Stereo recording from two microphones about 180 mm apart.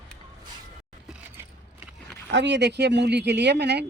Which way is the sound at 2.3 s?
75° right (ahead or behind).